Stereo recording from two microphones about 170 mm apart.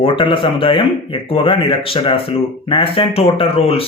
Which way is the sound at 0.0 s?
30° left (ahead or behind).